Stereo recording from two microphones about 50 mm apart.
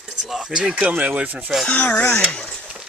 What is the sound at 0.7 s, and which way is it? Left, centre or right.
Speech, right.